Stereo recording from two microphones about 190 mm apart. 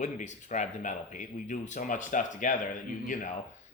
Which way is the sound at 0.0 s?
40° left (ahead or behind).